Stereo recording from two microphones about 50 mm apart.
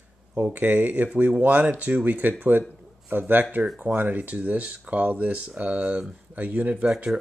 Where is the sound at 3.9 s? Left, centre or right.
Right.